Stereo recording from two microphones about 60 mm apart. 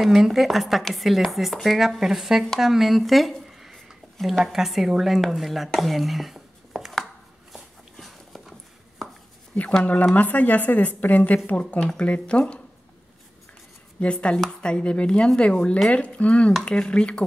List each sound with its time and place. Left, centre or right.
0.0 s speech: centre
7.5 s a sound: centre
9.8 s a woman's voice: left
12.0 s chopping: centre
13.9 s speech: centre
14.4 s chopping: centre
15.9 s a woman's voice: left
16.6 s chopping: centre